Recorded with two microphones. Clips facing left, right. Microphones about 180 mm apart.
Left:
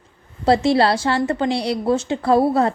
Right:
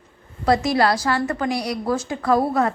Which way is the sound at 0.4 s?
30° left (ahead or behind).